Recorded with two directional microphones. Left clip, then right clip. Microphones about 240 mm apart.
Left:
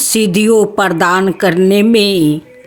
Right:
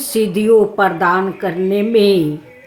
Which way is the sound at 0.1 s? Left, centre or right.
Left.